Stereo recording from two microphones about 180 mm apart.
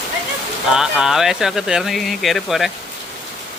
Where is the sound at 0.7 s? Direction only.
5° right (ahead or behind).